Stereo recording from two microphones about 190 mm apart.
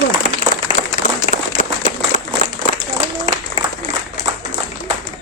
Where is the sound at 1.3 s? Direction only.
40° left (ahead or behind).